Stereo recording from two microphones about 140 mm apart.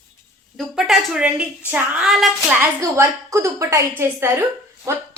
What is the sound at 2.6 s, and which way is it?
A woman's voice, 20° right (ahead or behind).